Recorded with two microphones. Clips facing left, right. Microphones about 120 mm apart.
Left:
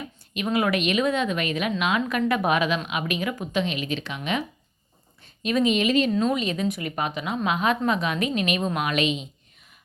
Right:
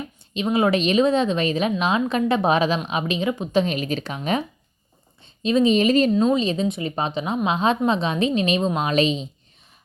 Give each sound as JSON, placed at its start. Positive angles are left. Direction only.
{"t": 0.3, "sound": "a woman's voice", "side_deg": -25}
{"t": 3.6, "sound": "a woman's voice", "side_deg": -40}
{"t": 5.2, "sound": "a woman's voice", "side_deg": -25}
{"t": 6.1, "sound": "a woman's voice", "side_deg": -20}